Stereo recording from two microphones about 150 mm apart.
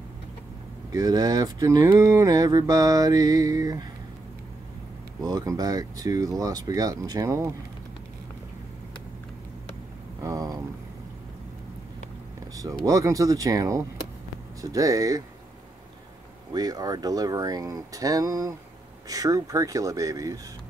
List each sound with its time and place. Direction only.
0.9 s speech: 25° right (ahead or behind)
5.2 s speech: 25° right (ahead or behind)
10.2 s a sound: 25° right (ahead or behind)
12.5 s speech: 20° right (ahead or behind)
16.5 s speech: 25° right (ahead or behind)